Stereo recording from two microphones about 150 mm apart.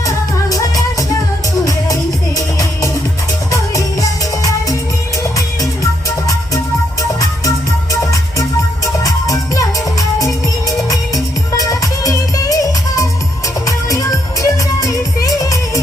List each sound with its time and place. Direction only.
0.5 s music: 25° left (ahead or behind)
5.8 s music: 20° left (ahead or behind)
8.1 s music: 20° left (ahead or behind)
10.8 s music: 25° left (ahead or behind)
14.4 s music: 20° left (ahead or behind)